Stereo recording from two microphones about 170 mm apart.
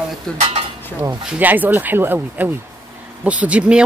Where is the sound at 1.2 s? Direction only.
10° right (ahead or behind).